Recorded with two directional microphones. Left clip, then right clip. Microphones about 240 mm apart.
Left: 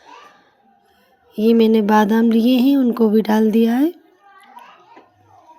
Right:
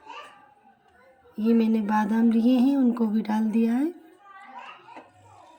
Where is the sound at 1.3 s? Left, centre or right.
Left.